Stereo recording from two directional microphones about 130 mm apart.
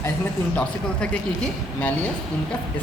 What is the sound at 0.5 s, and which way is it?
Speech, 10° left (ahead or behind).